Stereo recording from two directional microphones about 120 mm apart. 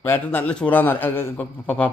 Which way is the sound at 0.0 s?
15° left (ahead or behind).